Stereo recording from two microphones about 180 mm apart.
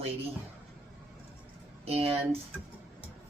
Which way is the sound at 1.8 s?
35° right (ahead or behind).